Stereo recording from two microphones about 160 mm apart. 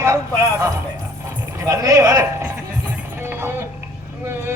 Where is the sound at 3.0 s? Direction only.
15° right (ahead or behind).